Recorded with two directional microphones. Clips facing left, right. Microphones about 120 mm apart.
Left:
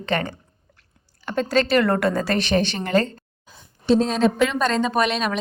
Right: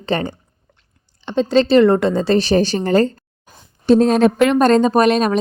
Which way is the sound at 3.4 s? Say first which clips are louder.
Right 6 dB; 50° right (ahead or behind).